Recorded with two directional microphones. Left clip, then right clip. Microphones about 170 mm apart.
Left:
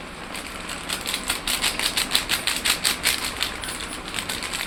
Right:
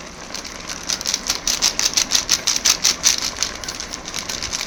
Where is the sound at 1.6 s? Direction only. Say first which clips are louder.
Right 6 dB; 35° right (ahead or behind).